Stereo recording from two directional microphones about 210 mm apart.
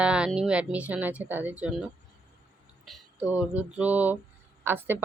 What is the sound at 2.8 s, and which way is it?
Speech, 5° right (ahead or behind).